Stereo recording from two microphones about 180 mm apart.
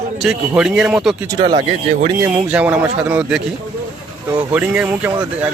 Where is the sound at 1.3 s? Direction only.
25° right (ahead or behind).